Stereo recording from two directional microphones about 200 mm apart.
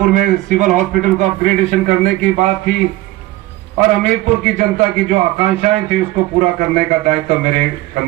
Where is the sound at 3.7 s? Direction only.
40° right (ahead or behind).